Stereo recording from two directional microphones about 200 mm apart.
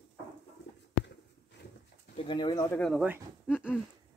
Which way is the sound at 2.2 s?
25° left (ahead or behind).